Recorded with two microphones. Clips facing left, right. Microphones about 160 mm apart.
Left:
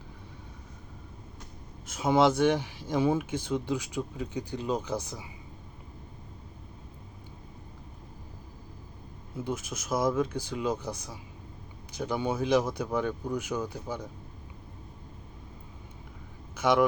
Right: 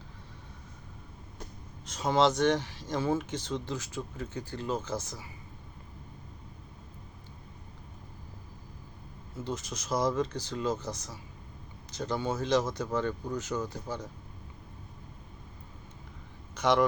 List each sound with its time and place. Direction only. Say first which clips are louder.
1.9 s speech: left 2 dB; 10° left (ahead or behind)
9.4 s speech: left 2 dB; 10° left (ahead or behind)
16.6 s speech: left 1 dB; 5° left (ahead or behind)